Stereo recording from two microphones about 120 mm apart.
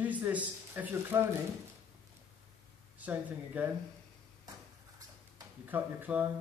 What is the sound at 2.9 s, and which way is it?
Speech, 15° right (ahead or behind).